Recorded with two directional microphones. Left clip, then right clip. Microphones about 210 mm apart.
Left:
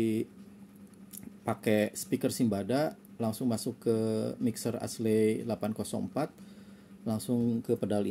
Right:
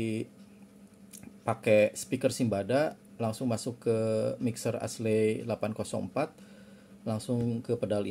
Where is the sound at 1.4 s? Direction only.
25° left (ahead or behind).